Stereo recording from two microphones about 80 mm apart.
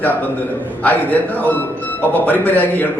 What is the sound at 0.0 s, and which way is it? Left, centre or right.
A man's voice, left.